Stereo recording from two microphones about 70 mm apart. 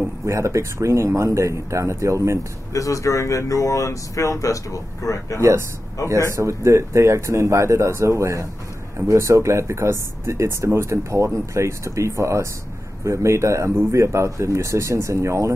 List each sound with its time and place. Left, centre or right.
0.3 s speech: right
2.7 s speech: left
6.3 s speech: right